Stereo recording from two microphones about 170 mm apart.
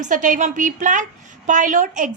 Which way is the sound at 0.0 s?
50° right (ahead or behind).